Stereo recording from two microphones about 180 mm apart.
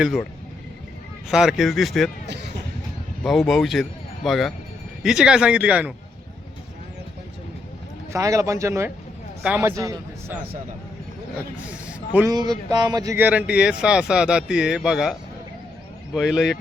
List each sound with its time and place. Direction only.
0.0 s speech: centre (ahead or behind)
1.3 s speech: 5° right (ahead or behind)
3.2 s speech: centre (ahead or behind)
8.1 s a man's voice: 15° right (ahead or behind)
11.6 s a man's voice: 5° right (ahead or behind)
12.3 s speech: 20° right (ahead or behind); by 15.1 s 5° right (ahead or behind)
16.1 s speech: 5° right (ahead or behind)